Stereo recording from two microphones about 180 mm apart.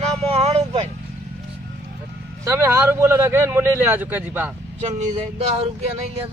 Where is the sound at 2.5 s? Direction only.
15° right (ahead or behind).